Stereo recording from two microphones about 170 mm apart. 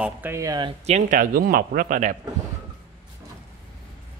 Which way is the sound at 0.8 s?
45° right (ahead or behind).